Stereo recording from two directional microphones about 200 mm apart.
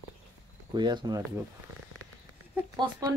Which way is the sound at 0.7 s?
20° right (ahead or behind).